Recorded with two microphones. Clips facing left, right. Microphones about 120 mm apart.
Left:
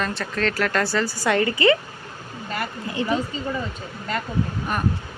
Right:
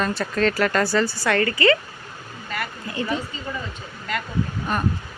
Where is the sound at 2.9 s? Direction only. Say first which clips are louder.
Left 2 dB; 20° left (ahead or behind).